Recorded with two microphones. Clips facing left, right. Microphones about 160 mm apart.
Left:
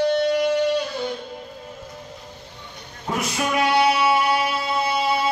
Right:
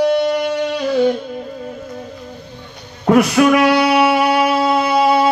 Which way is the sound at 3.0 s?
70° right (ahead or behind).